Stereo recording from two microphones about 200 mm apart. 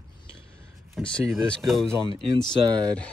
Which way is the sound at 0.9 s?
5° left (ahead or behind).